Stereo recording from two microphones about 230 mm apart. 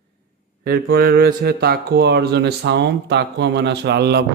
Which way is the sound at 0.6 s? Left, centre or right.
Right.